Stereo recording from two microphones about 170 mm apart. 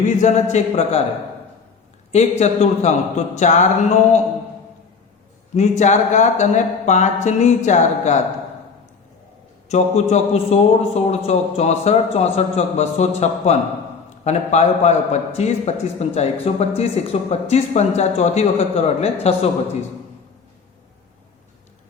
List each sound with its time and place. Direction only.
0.0 s a man's voice: 45° left (ahead or behind)
2.4 s a man's voice: 40° left (ahead or behind)
5.5 s speech: 45° left (ahead or behind)
9.6 s a man's voice: 40° left (ahead or behind)